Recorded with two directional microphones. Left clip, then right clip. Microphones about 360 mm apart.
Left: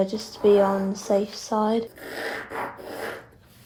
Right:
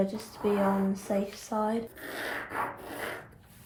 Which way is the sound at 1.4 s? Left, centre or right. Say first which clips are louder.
Left 6 dB; left.